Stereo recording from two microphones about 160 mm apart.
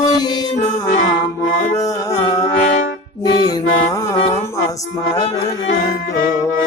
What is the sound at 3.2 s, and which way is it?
Mantra, 20° left (ahead or behind).